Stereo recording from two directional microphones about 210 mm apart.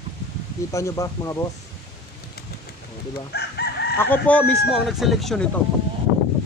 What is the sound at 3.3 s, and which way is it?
Chicken, 50° left (ahead or behind).